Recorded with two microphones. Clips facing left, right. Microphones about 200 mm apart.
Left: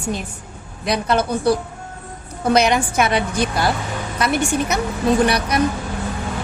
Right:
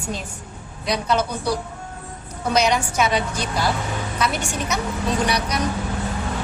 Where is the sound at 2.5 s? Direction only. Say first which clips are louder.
Left 3 dB; 55° left (ahead or behind).